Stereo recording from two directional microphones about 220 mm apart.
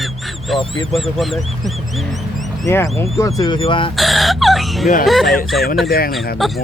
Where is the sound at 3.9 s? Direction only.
Centre (ahead or behind).